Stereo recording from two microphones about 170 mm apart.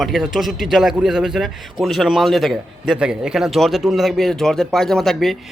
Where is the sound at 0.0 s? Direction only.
Centre (ahead or behind).